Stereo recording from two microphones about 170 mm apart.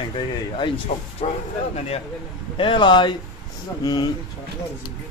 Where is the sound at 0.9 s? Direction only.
50° left (ahead or behind).